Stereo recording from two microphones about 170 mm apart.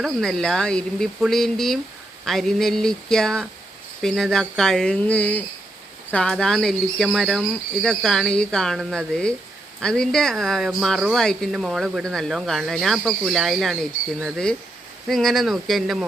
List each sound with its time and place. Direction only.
0.0 s speech: centre (ahead or behind)
15.0 s speech: centre (ahead or behind)